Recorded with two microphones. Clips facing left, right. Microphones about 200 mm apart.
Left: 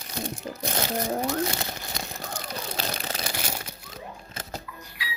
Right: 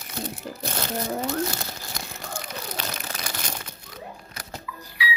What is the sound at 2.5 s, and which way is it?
Crumpling, 30° left (ahead or behind).